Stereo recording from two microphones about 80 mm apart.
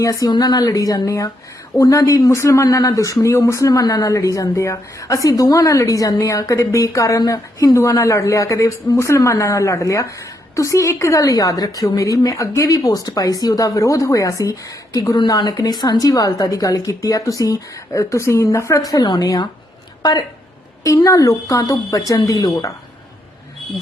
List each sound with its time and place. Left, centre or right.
0.0 s speech: left
3.7 s speech: left
15.3 s a woman's voice: left
20.8 s speech: left